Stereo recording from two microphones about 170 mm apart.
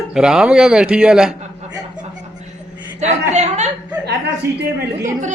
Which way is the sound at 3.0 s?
40° right (ahead or behind).